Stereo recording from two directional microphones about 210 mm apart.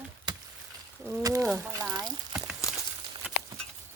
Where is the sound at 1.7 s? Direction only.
20° right (ahead or behind).